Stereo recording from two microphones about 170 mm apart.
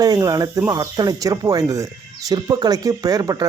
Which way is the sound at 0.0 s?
20° right (ahead or behind).